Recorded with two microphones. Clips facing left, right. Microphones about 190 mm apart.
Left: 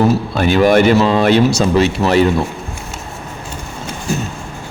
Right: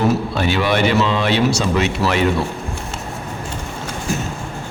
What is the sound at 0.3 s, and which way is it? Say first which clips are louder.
Speech: left 7 dB; 50° left (ahead or behind).